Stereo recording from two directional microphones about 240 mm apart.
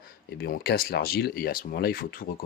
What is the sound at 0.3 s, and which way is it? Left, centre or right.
Speech, left.